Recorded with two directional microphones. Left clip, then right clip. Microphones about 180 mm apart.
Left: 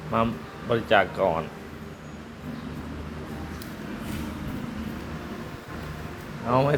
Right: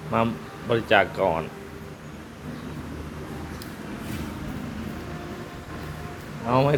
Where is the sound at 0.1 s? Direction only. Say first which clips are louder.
Right 1 dB; 20° right (ahead or behind).